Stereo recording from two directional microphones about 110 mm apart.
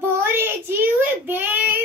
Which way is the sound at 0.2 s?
20° right (ahead or behind).